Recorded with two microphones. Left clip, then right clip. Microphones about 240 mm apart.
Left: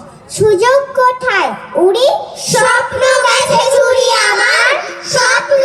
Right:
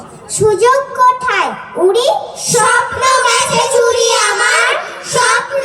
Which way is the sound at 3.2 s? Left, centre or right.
Centre.